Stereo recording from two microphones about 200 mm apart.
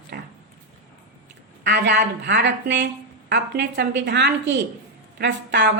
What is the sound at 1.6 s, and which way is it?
A woman's voice, 55° right (ahead or behind).